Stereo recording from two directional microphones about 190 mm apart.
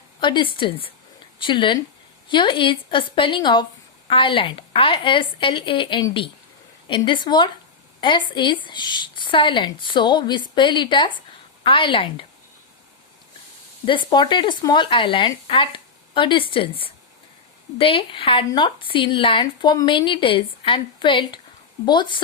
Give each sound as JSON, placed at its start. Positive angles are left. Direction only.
{"t": 0.2, "sound": "speech", "side_deg": 25}
{"t": 13.8, "sound": "speech", "side_deg": 25}